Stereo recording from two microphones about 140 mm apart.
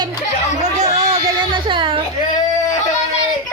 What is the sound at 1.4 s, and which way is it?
Speech, 35° right (ahead or behind).